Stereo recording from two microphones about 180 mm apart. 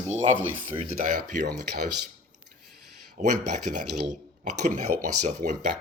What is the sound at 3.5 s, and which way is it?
Speech, 40° right (ahead or behind).